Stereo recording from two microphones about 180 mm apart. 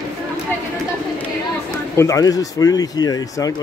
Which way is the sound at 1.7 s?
20° left (ahead or behind).